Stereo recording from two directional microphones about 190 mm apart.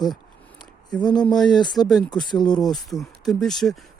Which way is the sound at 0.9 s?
5° left (ahead or behind).